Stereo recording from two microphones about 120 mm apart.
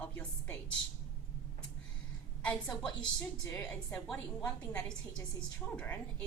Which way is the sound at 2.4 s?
10° left (ahead or behind).